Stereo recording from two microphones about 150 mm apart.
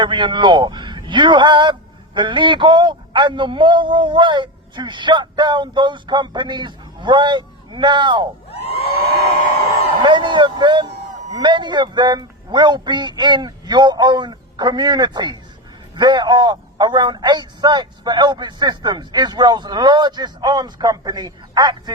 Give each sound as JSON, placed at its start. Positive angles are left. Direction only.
{"t": 0.0, "sound": "a man's voice", "side_deg": -30}
{"t": 8.4, "sound": "a sound", "side_deg": 45}
{"t": 10.0, "sound": "a man's voice", "side_deg": -30}